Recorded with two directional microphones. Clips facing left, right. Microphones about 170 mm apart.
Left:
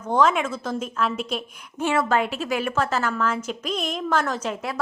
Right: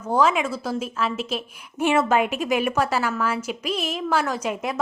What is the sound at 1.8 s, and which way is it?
A woman's voice, 15° right (ahead or behind).